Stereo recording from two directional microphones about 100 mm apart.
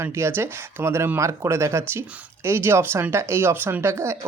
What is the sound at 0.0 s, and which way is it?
Speech, 25° right (ahead or behind).